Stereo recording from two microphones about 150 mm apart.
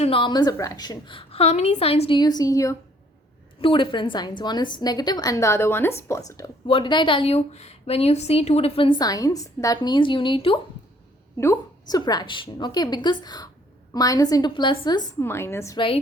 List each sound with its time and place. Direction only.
0.0 s a woman's voice: 35° left (ahead or behind)
3.6 s a woman's voice: 35° left (ahead or behind)
6.7 s a woman's voice: 35° left (ahead or behind)
11.3 s a woman's voice: 20° left (ahead or behind)
15.2 s a woman's voice: 15° left (ahead or behind)